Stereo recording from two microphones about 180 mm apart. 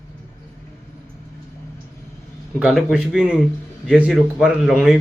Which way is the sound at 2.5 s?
5° right (ahead or behind).